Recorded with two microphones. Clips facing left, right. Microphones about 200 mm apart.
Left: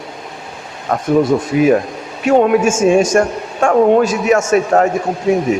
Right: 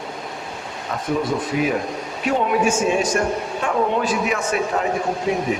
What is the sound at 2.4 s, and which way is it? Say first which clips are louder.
A man's voice: left 4 dB; 45° left (ahead or behind).